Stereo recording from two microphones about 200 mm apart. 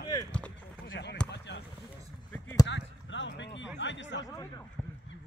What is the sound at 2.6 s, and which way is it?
Basketball bounce, 65° left (ahead or behind).